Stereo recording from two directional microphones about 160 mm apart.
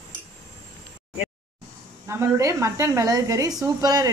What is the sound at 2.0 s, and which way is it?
A woman's voice, 15° right (ahead or behind).